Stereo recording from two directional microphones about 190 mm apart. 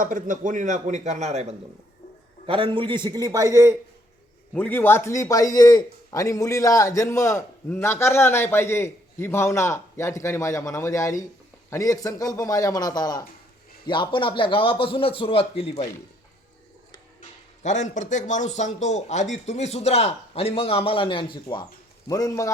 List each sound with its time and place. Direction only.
0.0 s a man's voice: 45° right (ahead or behind); by 3.8 s 15° right (ahead or behind)
4.5 s a man's voice: 10° left (ahead or behind); by 15.9 s 35° left (ahead or behind)
17.2 s a man's voice: 40° left (ahead or behind); by 22.5 s 15° left (ahead or behind)